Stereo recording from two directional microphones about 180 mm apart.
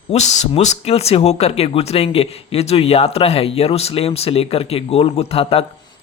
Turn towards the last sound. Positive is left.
turn(degrees=30)  # may be behind; listen again after turning